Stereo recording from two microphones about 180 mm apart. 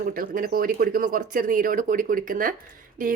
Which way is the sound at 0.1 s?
55° right (ahead or behind).